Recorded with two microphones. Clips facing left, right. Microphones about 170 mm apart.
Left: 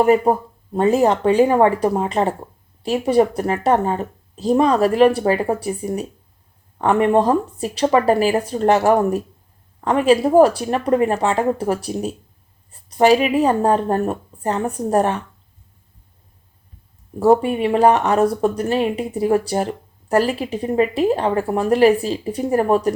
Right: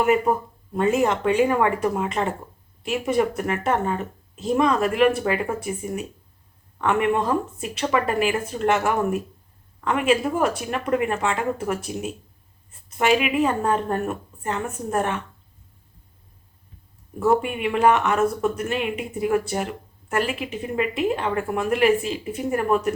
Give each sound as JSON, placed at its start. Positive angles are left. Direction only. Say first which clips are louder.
{"t": 0.0, "sound": "speech", "louder": "left 5 dB", "side_deg": 35}
{"t": 17.2, "sound": "speech", "louder": "left 6 dB", "side_deg": 35}